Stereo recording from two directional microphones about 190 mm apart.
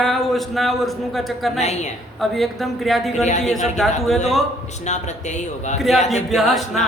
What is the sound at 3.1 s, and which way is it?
Speech, 40° left (ahead or behind).